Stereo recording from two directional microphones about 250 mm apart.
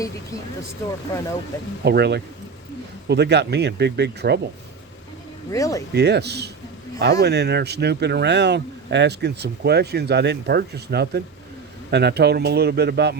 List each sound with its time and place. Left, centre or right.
0.8 s speech: centre
1.8 s speech: right
5.5 s speech: centre
5.9 s speech: right